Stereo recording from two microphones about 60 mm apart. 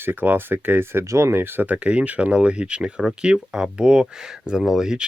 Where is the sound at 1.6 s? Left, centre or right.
Right.